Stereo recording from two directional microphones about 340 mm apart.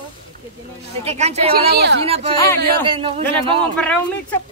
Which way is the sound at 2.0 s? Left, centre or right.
Centre.